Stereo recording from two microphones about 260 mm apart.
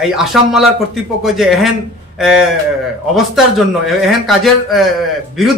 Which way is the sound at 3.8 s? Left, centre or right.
Centre.